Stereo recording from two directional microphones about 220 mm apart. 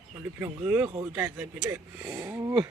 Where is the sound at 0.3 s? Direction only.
10° right (ahead or behind).